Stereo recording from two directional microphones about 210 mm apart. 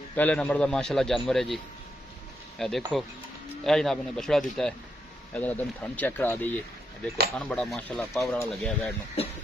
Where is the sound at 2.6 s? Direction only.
Centre (ahead or behind).